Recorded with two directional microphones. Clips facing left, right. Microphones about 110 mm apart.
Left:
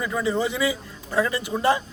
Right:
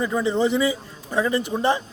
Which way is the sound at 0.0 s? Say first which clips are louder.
Right 3 dB; 25° right (ahead or behind).